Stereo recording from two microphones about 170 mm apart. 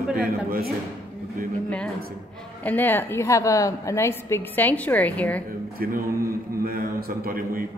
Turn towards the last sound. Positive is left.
turn(degrees=-60)  # may be behind; listen again after turning